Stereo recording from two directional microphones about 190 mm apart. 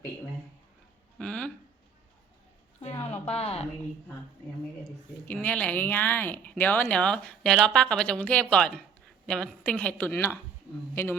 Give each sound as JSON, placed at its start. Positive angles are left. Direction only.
{"t": 1.2, "sound": "speech", "side_deg": 5}
{"t": 3.0, "sound": "a sound", "side_deg": 30}
{"t": 5.2, "sound": "speech", "side_deg": 10}